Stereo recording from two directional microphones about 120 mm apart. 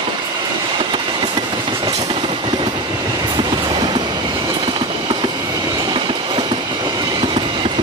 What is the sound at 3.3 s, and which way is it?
Train, 40° right (ahead or behind).